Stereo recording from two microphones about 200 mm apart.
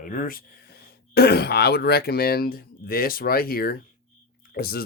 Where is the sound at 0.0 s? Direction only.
45° left (ahead or behind).